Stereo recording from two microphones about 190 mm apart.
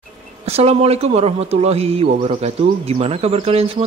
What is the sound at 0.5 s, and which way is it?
Speech, 35° right (ahead or behind).